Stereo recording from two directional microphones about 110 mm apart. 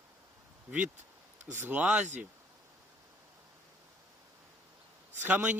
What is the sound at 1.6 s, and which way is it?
Speech, 10° right (ahead or behind).